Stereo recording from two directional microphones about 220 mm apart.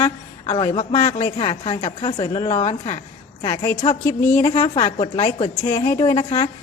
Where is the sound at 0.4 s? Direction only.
25° left (ahead or behind).